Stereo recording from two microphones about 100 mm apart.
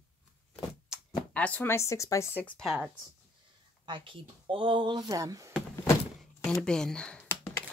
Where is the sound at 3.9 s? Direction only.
60° right (ahead or behind).